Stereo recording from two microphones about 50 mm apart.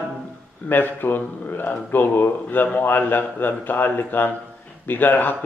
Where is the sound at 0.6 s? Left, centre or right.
Left.